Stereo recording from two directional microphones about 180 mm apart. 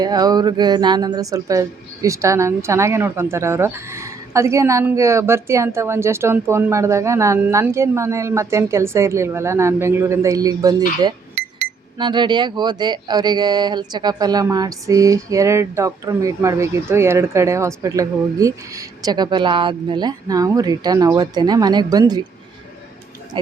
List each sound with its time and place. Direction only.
0.0 s a woman's voice: 20° right (ahead or behind)